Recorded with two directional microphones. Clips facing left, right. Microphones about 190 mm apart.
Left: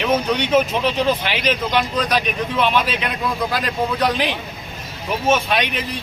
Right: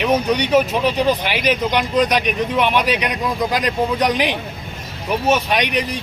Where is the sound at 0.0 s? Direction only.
15° right (ahead or behind).